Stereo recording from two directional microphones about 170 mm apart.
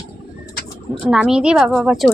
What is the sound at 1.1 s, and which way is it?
A woman's voice, 5° right (ahead or behind).